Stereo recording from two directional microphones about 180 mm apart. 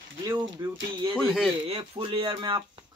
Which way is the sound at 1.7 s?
30° right (ahead or behind).